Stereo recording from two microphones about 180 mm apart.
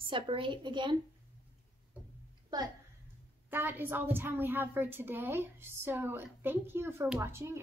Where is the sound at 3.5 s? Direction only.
10° right (ahead or behind).